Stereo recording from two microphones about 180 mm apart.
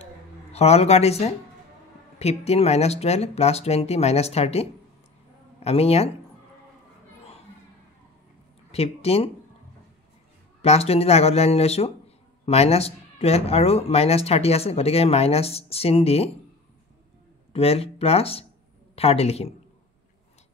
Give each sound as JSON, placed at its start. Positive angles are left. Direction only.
{"t": 0.5, "sound": "speech", "side_deg": 35}
{"t": 8.7, "sound": "speech", "side_deg": 35}
{"t": 10.6, "sound": "speech", "side_deg": 35}
{"t": 17.5, "sound": "speech", "side_deg": 35}